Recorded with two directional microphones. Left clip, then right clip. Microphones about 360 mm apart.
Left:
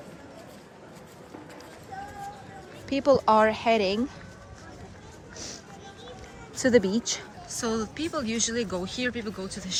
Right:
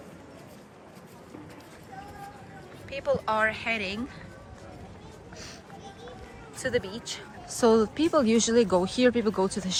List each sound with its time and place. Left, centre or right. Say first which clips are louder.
2.9 s speech: left 7 dB; centre
6.6 s speech: left 7 dB; centre
7.4 s speech: right 9 dB; centre